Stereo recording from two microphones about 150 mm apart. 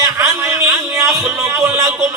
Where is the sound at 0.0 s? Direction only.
20° right (ahead or behind).